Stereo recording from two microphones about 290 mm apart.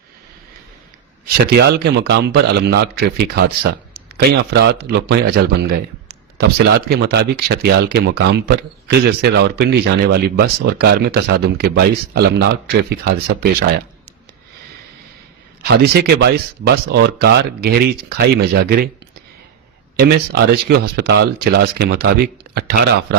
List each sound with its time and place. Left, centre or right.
1.5 s speech: right
15.6 s speech: right
20.0 s speech: right